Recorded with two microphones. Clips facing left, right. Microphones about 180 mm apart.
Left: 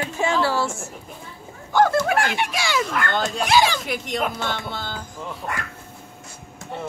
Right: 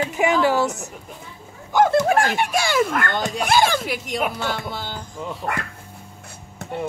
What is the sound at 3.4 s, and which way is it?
Speech, 50° right (ahead or behind).